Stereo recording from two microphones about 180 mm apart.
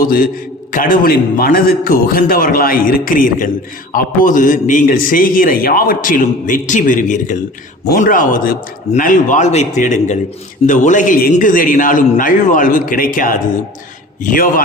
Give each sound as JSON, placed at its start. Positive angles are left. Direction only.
{"t": 0.0, "sound": "a man's voice", "side_deg": 50}